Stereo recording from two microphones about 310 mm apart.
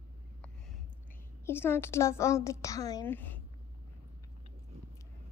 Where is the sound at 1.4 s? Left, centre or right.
Centre.